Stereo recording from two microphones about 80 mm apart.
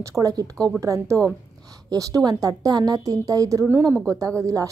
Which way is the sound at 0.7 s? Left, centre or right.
Right.